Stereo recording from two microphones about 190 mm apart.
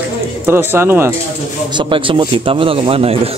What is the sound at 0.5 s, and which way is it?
Music, 10° right (ahead or behind).